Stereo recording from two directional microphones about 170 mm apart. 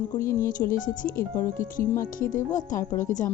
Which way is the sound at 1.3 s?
15° left (ahead or behind).